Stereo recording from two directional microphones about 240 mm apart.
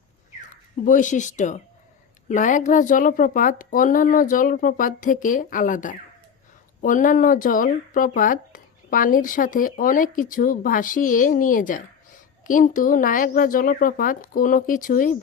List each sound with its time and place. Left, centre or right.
0.5 s speech: left